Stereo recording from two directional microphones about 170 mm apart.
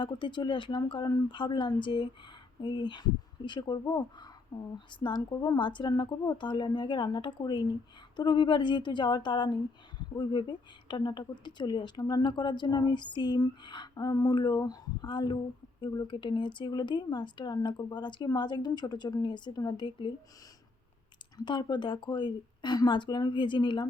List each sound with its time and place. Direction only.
0.0 s speech: 25° left (ahead or behind)
21.3 s speech: 25° left (ahead or behind)